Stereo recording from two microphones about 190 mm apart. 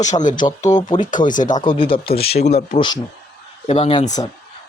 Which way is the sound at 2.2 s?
55° left (ahead or behind).